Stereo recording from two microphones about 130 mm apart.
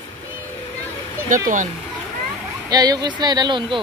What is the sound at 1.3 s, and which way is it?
Speech, 85° right.